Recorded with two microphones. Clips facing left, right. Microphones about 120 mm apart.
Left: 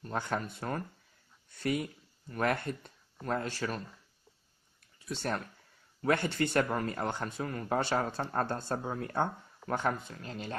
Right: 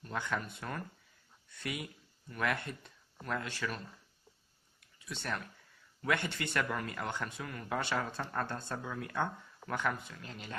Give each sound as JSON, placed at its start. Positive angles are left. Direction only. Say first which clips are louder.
{"t": 0.0, "sound": "speech", "louder": "left 3 dB", "side_deg": 35}
{"t": 4.9, "sound": "speech", "louder": "left 5 dB", "side_deg": 35}